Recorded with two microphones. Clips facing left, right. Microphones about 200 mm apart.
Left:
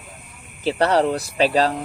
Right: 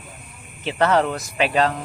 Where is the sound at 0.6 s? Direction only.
35° left (ahead or behind).